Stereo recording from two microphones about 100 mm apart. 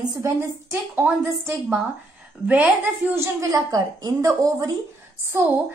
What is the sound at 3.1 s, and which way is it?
A woman's voice, 30° right (ahead or behind).